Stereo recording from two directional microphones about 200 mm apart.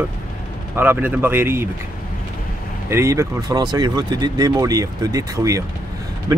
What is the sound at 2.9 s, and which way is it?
Speech, 15° right (ahead or behind).